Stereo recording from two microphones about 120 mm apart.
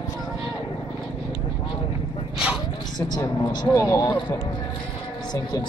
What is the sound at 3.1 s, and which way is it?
Speech, 35° left (ahead or behind).